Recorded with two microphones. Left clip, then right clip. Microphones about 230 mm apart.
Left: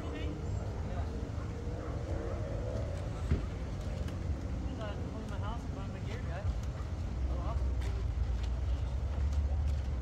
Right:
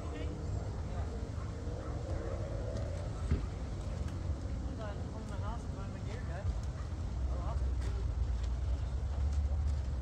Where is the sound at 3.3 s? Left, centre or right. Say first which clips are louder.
Left 2 dB; left.